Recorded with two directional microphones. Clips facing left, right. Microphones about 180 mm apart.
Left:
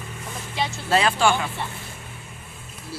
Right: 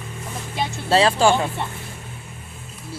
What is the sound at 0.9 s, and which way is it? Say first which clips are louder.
Speech: right 4 dB; 30° right (ahead or behind).